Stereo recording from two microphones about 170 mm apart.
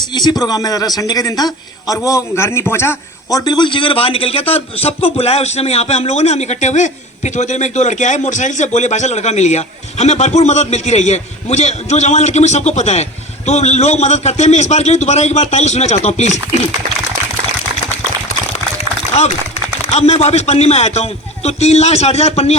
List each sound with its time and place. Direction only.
0.1 s a man's voice: 25° left (ahead or behind); by 16.4 s 40° left (ahead or behind)
19.9 s a man's voice: 40° left (ahead or behind)